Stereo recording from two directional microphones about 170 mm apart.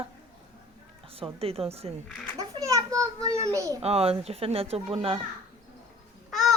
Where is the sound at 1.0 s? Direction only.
35° right (ahead or behind).